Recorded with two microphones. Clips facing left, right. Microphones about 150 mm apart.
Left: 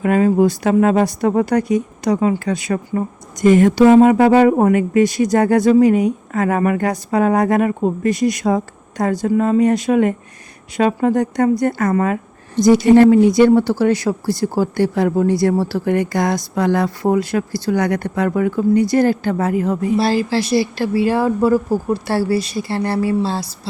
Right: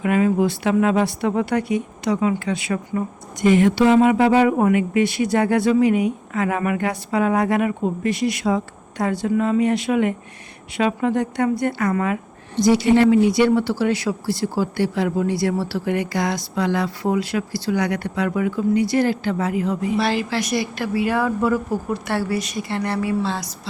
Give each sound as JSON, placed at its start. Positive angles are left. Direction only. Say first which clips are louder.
{"t": 0.0, "sound": "a woman's voice", "louder": "left 4 dB", "side_deg": 40}